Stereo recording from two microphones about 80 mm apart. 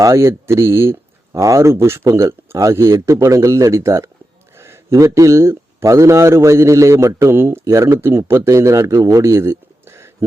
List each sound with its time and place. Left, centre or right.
0.0 s a man's voice: right
7.3 s a man's voice: right